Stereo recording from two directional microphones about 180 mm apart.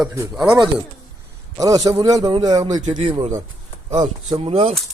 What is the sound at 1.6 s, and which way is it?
Speech, 20° right (ahead or behind).